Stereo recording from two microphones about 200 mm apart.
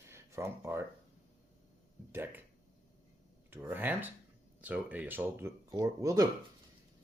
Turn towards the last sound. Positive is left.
turn(degrees=-15)  # may be behind; listen again after turning